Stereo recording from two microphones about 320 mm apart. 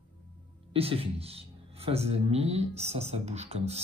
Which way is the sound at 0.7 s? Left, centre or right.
Centre.